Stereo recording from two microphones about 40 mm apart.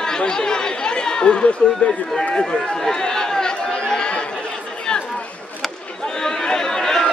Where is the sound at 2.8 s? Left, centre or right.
Centre.